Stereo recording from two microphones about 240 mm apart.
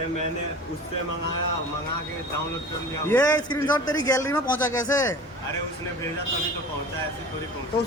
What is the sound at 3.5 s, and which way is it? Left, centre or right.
A man's voice, centre.